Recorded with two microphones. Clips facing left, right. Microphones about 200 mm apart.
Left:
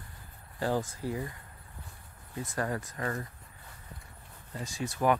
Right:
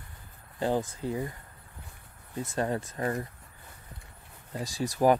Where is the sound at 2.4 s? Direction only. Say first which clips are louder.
Right 3 dB; 25° right (ahead or behind).